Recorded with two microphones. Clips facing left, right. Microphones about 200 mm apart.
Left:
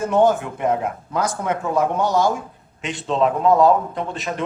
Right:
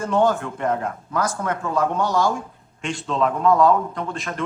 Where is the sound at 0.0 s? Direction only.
20° left (ahead or behind).